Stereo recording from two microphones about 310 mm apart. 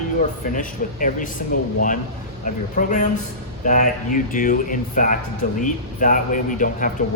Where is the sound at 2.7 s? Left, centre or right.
Left.